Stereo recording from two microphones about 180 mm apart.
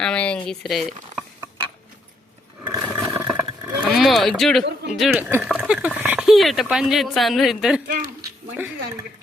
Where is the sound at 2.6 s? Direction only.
10° right (ahead or behind).